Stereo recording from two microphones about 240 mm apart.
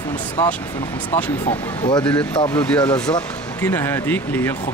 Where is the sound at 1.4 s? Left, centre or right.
Centre.